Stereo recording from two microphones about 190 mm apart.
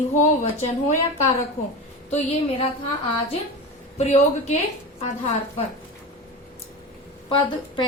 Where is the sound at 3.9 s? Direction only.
35° left (ahead or behind).